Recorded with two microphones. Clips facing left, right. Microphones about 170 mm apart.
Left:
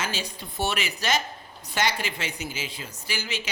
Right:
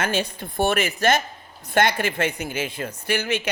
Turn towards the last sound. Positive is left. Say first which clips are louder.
# right 9 dB
turn(degrees=-55)  # may be behind; listen again after turning